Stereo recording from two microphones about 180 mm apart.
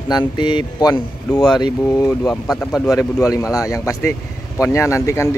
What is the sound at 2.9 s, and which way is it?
Speech, 15° left (ahead or behind).